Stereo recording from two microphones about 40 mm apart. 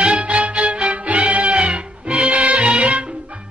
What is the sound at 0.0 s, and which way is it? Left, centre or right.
Music, right.